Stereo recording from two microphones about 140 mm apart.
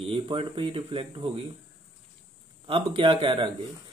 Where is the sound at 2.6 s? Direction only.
40° right (ahead or behind).